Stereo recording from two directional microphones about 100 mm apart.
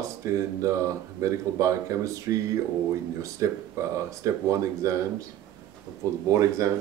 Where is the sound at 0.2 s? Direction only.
30° right (ahead or behind).